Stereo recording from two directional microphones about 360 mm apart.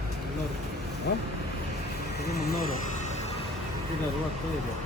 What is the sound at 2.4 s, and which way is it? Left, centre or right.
Speech, left.